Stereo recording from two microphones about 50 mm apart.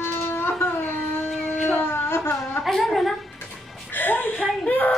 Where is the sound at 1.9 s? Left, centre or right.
Left.